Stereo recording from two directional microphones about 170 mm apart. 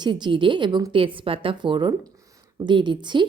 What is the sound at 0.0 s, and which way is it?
Speech, 25° right (ahead or behind).